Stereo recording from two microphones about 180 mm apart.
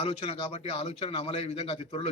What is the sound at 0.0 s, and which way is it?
Speech, 30° left (ahead or behind).